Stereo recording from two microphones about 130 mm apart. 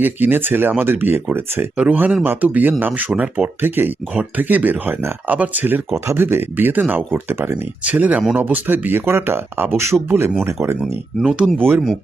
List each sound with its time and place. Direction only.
0.0 s speech: 15° right (ahead or behind)
11.2 s speech: 5° right (ahead or behind)